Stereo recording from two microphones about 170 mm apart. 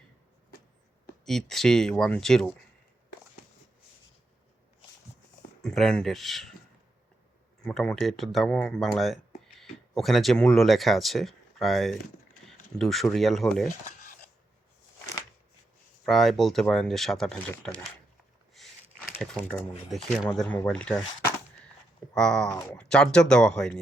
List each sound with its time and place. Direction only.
1.2 s speech: centre (ahead or behind)
5.6 s speech: 5° left (ahead or behind)
7.6 s speech: 5° left (ahead or behind)
16.0 s speech: centre (ahead or behind)
18.5 s a sound: centre (ahead or behind)
19.2 s speech: 10° left (ahead or behind)
22.4 s speech: 20° left (ahead or behind)
22.8 s speech: 5° left (ahead or behind)